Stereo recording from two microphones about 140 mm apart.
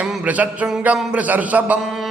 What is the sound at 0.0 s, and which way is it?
Mantra, 10° right (ahead or behind).